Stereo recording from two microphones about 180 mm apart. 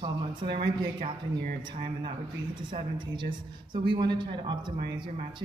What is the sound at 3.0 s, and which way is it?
A woman's voice, 25° right (ahead or behind).